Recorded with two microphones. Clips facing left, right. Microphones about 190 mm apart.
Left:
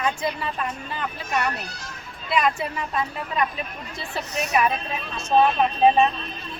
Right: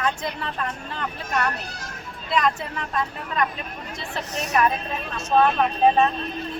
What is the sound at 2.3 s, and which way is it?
Speech, 10° left (ahead or behind).